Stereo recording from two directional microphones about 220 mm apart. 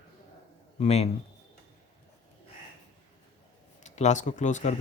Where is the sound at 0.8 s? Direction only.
30° left (ahead or behind).